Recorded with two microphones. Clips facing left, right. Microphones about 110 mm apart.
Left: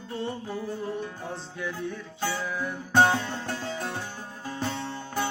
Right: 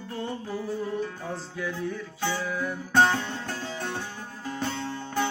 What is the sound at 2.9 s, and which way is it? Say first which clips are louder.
Music: left 1 dB; 15° left (ahead or behind).